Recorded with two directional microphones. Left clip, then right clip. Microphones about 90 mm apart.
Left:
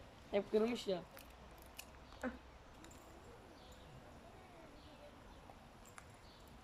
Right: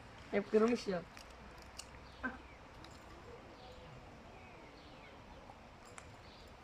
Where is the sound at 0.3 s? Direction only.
25° left (ahead or behind).